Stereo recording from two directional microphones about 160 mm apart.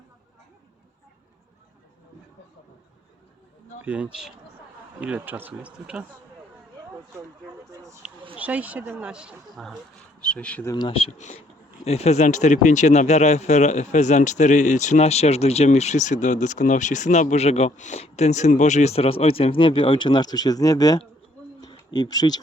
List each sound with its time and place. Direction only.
3.8 s speech: 10° right (ahead or behind)
7.6 s a sound: 20° right (ahead or behind)
8.4 s speech: 10° right (ahead or behind)
10.2 s speech: 5° left (ahead or behind)
10.7 s speech: 30° left (ahead or behind)
21.6 s a sound: 30° left (ahead or behind)